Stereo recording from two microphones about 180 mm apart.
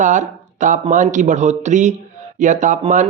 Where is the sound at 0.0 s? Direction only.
45° right (ahead or behind).